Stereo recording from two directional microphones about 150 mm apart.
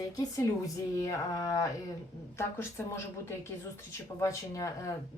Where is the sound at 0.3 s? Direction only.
25° left (ahead or behind).